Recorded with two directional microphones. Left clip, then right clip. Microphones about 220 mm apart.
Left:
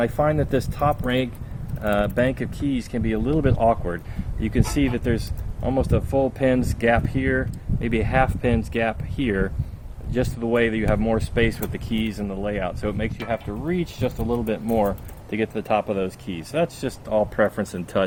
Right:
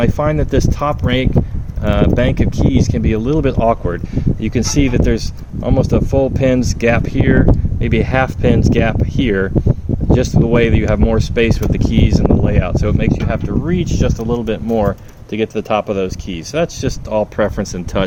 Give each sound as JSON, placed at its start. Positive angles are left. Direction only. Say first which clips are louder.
{"t": 0.0, "sound": "speech", "louder": "right 5 dB", "side_deg": -40}